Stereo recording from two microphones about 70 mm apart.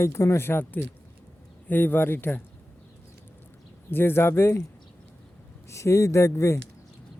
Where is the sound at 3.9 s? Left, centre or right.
Left.